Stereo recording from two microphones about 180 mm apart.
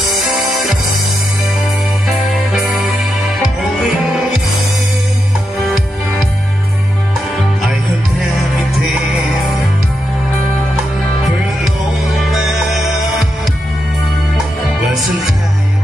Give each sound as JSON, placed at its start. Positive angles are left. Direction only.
{"t": 0.0, "sound": "music", "side_deg": 0}
{"t": 2.5, "sound": "music", "side_deg": -5}
{"t": 12.3, "sound": "music", "side_deg": 0}